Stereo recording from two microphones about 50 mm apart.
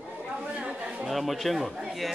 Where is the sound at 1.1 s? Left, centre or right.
Centre.